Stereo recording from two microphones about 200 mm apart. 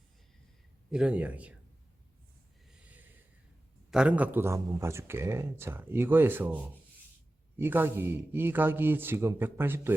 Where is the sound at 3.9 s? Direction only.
5° right (ahead or behind).